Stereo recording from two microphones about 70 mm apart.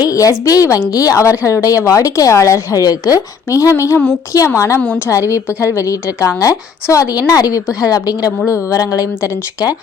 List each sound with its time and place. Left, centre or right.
0.0 s a woman's voice: left
3.8 s a woman's voice: left